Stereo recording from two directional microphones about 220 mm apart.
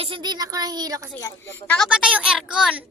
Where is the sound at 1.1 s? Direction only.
15° left (ahead or behind); by 2.9 s 5° right (ahead or behind).